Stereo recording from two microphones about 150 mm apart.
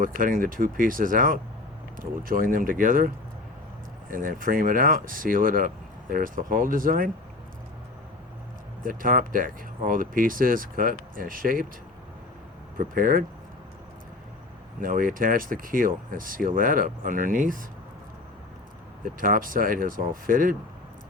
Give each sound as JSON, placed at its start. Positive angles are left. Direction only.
{"t": 0.0, "sound": "speech", "side_deg": -70}
{"t": 4.1, "sound": "speech", "side_deg": -65}
{"t": 8.8, "sound": "speech", "side_deg": -65}
{"t": 12.7, "sound": "speech", "side_deg": -65}
{"t": 14.8, "sound": "speech", "side_deg": -65}
{"t": 19.0, "sound": "speech", "side_deg": -65}